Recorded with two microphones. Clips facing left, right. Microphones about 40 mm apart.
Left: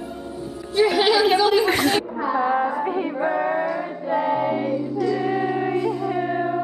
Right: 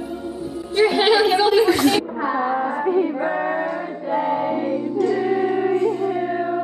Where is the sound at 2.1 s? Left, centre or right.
Centre.